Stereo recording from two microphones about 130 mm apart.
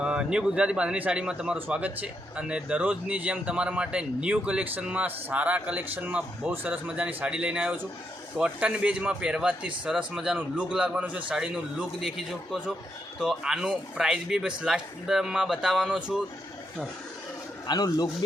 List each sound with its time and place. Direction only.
0.0 s a man's voice: 5° right (ahead or behind)
17.7 s speech: 30° left (ahead or behind)